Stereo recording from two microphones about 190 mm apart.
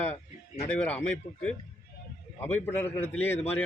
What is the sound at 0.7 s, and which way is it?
A man's voice, 5° left (ahead or behind).